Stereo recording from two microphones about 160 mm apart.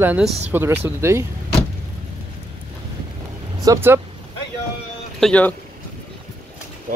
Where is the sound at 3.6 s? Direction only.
15° right (ahead or behind).